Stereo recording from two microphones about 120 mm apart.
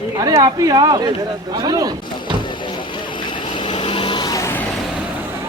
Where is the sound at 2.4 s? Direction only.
40° left (ahead or behind).